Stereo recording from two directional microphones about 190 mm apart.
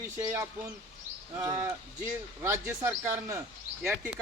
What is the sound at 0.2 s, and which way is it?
Speech, 15° right (ahead or behind).